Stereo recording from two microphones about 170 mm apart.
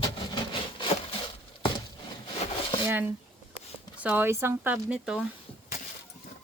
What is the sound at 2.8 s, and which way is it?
Speech, 15° right (ahead or behind).